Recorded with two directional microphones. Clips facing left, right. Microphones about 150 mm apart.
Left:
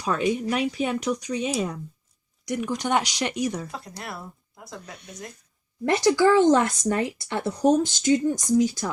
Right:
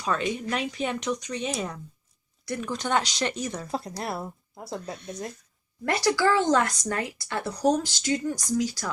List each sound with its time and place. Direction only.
0.0 s speech: 10° left (ahead or behind)
3.7 s speech: 35° right (ahead or behind)
5.8 s speech: 20° left (ahead or behind)